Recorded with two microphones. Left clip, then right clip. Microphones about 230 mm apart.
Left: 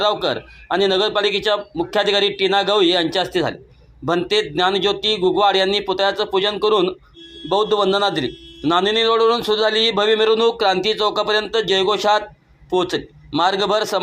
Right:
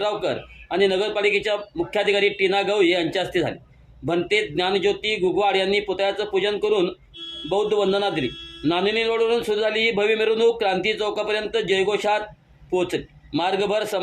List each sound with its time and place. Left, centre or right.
0.0 s a man's voice: centre